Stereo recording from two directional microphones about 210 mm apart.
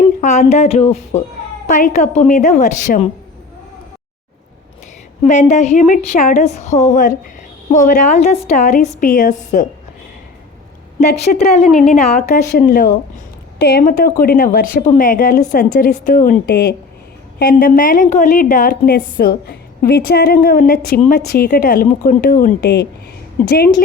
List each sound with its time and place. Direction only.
0.2 s speech: 35° left (ahead or behind)
5.2 s speech: 35° left (ahead or behind)
11.3 s a woman's voice: 45° left (ahead or behind)
11.9 s speech: 35° left (ahead or behind)
13.6 s a woman's voice: 50° left (ahead or behind)